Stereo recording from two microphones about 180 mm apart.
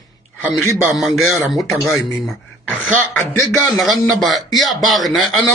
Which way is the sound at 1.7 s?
15° left (ahead or behind).